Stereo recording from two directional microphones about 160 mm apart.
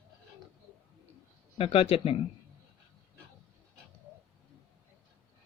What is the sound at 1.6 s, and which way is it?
Speech, 35° left (ahead or behind).